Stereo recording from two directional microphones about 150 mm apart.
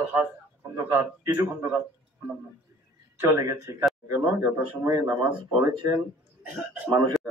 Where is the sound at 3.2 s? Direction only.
15° right (ahead or behind).